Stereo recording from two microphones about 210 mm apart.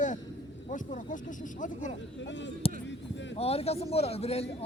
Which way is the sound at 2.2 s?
60° left (ahead or behind).